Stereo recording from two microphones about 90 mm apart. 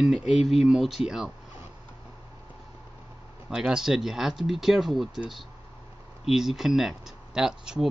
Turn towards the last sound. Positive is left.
turn(degrees=-5)  # may be behind; listen again after turning